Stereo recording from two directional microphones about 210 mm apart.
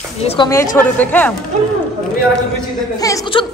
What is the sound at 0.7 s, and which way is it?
Speech, 10° left (ahead or behind).